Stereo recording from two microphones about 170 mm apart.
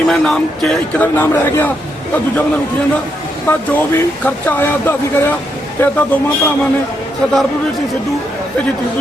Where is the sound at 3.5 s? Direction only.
10° left (ahead or behind).